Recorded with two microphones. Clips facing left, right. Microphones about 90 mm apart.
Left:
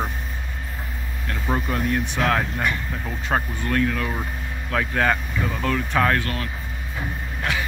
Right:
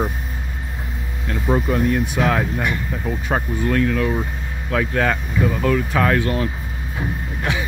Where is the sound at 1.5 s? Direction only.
Centre (ahead or behind).